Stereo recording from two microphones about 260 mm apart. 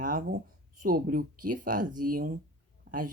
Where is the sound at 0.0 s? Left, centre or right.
Right.